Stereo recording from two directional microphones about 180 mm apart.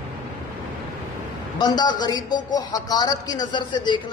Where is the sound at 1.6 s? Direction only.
25° left (ahead or behind).